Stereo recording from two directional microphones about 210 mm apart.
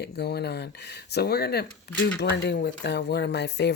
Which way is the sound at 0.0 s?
50° left (ahead or behind).